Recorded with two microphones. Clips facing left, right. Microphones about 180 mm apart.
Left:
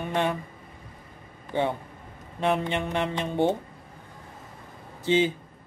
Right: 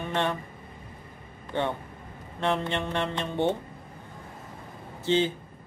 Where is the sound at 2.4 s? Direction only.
15° left (ahead or behind).